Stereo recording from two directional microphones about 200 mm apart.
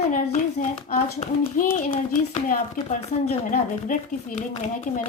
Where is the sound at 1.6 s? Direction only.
45° left (ahead or behind).